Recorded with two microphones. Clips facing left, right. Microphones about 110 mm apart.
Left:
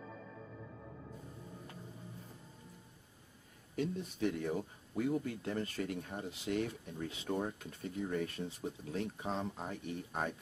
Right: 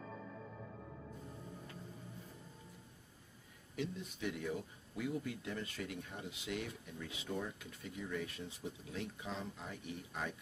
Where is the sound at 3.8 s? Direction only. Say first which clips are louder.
Left 6 dB; 40° left (ahead or behind).